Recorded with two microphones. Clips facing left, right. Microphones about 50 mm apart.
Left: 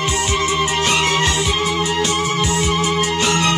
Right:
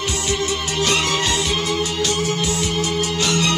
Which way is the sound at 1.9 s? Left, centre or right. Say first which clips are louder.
Left 3 dB; left.